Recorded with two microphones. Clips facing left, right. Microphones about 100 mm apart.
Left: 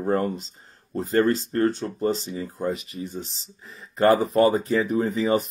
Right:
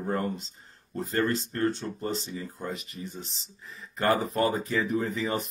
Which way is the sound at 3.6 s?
30° left (ahead or behind).